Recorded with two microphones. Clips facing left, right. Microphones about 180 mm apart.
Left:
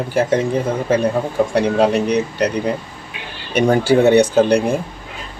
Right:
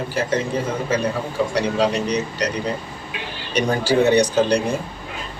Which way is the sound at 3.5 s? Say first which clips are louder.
Left 5 dB; 55° left (ahead or behind).